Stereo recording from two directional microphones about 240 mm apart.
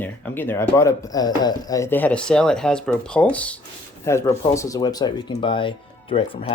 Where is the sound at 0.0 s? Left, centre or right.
Centre.